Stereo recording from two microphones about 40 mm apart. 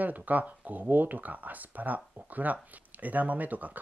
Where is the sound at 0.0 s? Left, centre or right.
Right.